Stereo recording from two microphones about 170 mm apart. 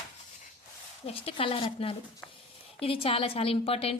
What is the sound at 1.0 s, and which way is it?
Speech, 35° left (ahead or behind).